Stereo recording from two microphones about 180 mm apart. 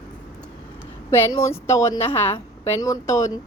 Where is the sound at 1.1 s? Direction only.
15° left (ahead or behind).